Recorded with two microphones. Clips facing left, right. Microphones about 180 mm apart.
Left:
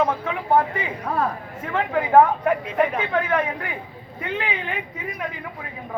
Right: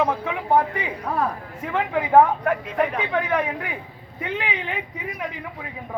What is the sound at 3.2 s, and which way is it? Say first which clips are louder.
Speech: left 1 dB; 15° right (ahead or behind).